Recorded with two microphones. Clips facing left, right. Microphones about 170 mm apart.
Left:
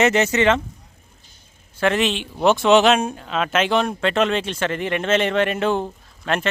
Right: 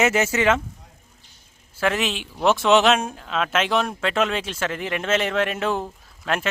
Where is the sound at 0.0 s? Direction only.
5° right (ahead or behind).